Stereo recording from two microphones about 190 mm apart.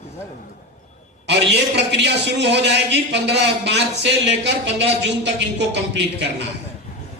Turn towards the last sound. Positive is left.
turn(degrees=-65)  # may be behind; listen again after turning